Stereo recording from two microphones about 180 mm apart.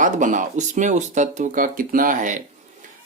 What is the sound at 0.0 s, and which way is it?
Speech, 45° right (ahead or behind).